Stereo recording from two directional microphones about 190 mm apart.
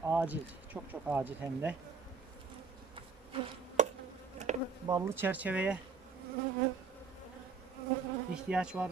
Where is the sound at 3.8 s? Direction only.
40° right (ahead or behind).